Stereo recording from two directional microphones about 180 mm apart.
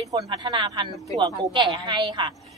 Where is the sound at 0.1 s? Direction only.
20° right (ahead or behind).